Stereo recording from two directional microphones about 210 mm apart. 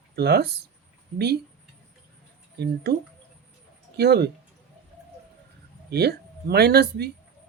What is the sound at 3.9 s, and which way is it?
Speech, 50° right (ahead or behind).